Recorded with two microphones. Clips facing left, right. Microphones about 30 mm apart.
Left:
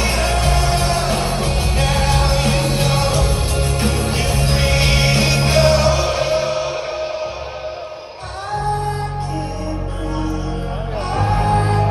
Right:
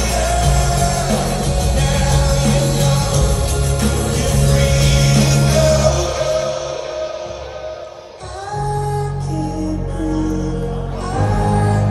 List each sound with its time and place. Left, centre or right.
0.0 s music: left
8.6 s music: left